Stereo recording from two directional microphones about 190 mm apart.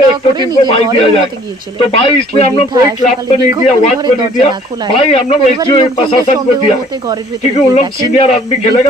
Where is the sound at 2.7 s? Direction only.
20° right (ahead or behind).